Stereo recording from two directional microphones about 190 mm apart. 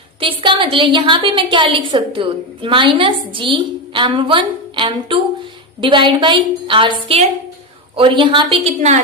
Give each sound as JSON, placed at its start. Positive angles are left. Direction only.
{"t": 0.2, "sound": "a woman's voice", "side_deg": -25}